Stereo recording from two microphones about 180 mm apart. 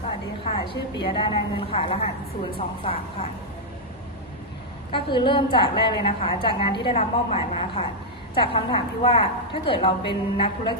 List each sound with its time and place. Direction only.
0.4 s a woman's voice: 30° left (ahead or behind)
4.9 s a woman's voice: 25° left (ahead or behind)